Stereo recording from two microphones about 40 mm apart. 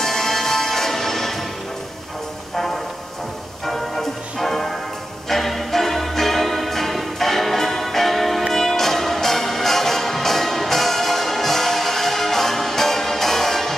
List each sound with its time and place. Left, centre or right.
0.0 s music: centre
3.6 s music: centre